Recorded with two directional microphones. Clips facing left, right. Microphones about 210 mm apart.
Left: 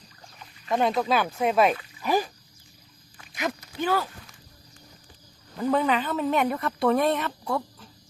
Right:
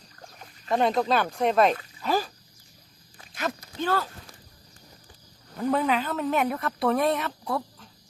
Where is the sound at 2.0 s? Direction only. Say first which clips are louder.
Left 2 dB; 15° left (ahead or behind).